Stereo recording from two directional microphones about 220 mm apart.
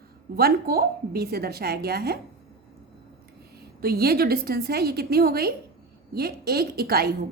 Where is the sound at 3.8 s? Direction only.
45° right (ahead or behind).